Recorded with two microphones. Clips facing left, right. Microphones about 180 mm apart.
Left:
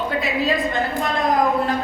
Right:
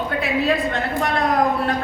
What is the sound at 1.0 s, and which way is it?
Speech, 65° right (ahead or behind).